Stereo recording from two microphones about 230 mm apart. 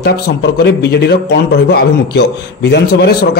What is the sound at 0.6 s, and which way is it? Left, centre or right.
A man's voice, left.